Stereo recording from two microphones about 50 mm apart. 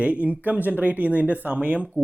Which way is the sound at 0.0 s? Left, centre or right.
Right.